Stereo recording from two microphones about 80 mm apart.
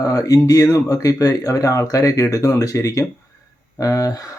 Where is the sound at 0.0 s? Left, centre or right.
Left.